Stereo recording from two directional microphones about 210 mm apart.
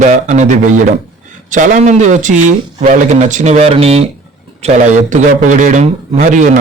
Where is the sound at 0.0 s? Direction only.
35° right (ahead or behind).